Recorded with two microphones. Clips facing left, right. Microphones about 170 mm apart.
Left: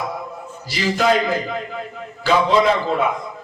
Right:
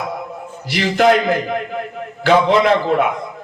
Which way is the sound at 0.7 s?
65° right (ahead or behind).